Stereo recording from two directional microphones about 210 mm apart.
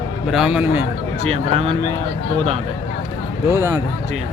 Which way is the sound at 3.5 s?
15° right (ahead or behind).